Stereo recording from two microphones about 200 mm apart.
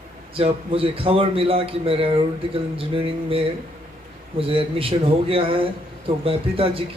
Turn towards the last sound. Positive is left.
turn(degrees=-30)  # may be behind; listen again after turning